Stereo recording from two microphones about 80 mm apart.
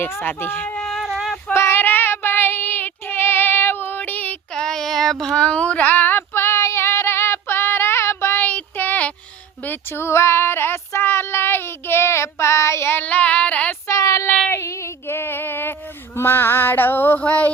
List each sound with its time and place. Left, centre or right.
0.0 s music: left
0.8 s a sound: centre
1.5 s child singing: left
4.5 s child singing: centre
9.6 s child singing: left
13.8 s child singing: left
14.5 s female singing: left
16.1 s music: left
17.2 s female singing: centre